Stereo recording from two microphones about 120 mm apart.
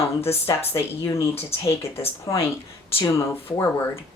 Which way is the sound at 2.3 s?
35° left (ahead or behind).